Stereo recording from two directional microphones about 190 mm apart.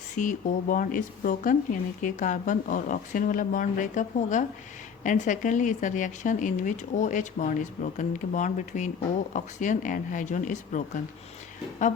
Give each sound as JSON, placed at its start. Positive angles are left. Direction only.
{"t": 0.2, "sound": "speech", "side_deg": 45}